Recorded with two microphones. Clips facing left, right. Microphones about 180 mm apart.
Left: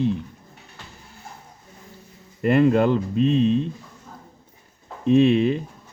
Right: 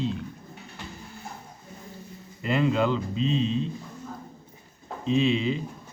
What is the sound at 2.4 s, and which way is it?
A man's voice, 55° left (ahead or behind).